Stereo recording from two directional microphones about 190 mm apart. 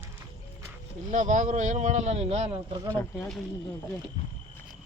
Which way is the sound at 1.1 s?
40° right (ahead or behind).